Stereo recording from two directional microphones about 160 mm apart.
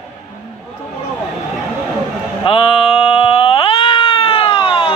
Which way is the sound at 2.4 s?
35° left (ahead or behind).